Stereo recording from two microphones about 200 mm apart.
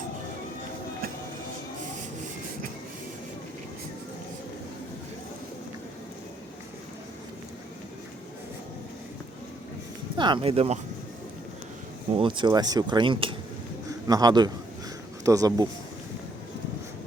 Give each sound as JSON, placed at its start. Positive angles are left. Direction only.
{"t": 10.2, "sound": "speech", "side_deg": -25}
{"t": 12.1, "sound": "speech", "side_deg": -25}